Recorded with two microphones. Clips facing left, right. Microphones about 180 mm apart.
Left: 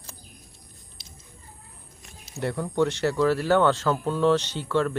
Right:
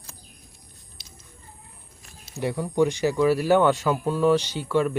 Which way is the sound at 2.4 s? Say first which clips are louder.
Right 2 dB; 10° right (ahead or behind).